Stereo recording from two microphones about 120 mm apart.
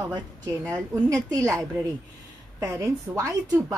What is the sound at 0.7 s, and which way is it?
A woman's voice, 30° right (ahead or behind).